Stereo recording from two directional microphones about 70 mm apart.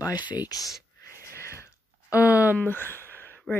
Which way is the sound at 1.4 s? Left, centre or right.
Left.